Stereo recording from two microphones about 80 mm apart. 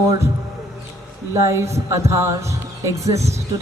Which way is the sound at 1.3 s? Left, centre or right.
Right.